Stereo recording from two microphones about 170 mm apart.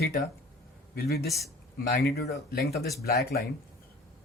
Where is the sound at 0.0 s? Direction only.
60° left (ahead or behind).